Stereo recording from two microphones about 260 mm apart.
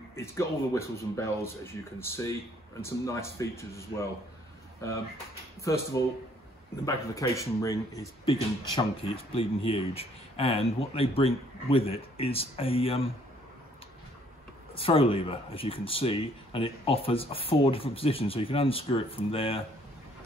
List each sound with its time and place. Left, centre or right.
0.1 s speech: centre
5.6 s speech: centre
14.8 s speech: left